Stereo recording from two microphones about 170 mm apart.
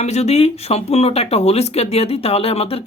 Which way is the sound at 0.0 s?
40° left (ahead or behind).